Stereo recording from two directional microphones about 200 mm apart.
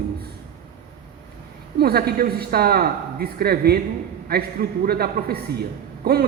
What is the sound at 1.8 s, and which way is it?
Speech, 50° right (ahead or behind).